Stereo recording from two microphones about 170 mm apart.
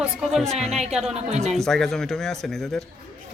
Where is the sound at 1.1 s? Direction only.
40° right (ahead or behind).